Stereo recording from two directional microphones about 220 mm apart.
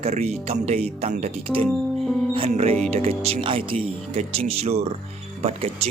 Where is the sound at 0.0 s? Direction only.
30° right (ahead or behind).